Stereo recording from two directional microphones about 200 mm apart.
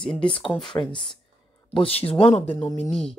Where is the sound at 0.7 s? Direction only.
25° left (ahead or behind).